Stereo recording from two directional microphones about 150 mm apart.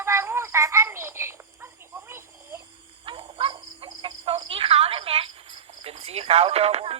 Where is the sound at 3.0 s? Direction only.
35° right (ahead or behind).